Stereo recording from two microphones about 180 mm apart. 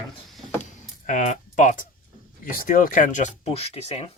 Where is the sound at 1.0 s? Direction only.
45° left (ahead or behind).